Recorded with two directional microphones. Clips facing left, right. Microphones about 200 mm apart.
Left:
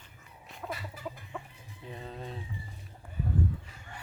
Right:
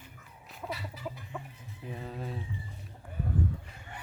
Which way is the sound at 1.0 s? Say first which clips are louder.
Even; 50° left (ahead or behind).